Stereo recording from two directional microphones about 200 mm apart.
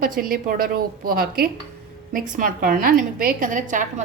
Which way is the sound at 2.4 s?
45° right (ahead or behind).